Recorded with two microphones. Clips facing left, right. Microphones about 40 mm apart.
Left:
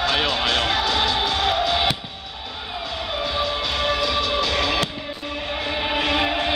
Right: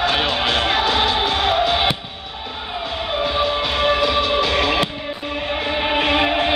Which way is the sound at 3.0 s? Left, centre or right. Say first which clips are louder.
Right 5 dB; right.